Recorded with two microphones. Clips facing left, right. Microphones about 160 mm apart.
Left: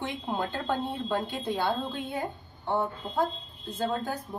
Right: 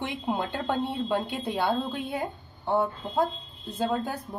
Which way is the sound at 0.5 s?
15° right (ahead or behind).